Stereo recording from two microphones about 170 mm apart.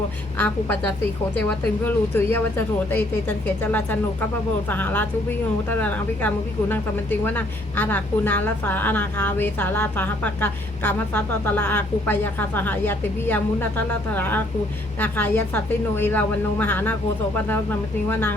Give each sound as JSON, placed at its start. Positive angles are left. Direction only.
{"t": 0.3, "sound": "a woman's voice", "side_deg": 10}